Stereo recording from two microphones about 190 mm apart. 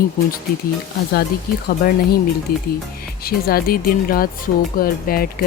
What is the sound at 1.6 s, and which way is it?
Speech, 50° left (ahead or behind).